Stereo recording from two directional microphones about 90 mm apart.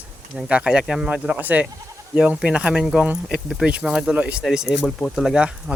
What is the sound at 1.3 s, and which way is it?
Speech, 15° right (ahead or behind).